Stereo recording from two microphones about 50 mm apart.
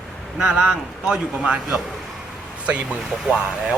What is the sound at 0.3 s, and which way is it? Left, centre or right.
Speech, centre.